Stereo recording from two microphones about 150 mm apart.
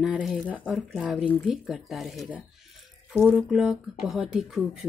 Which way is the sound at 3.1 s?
5° left (ahead or behind).